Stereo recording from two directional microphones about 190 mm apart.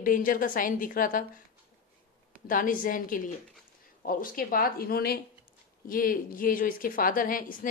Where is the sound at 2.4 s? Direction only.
45° left (ahead or behind).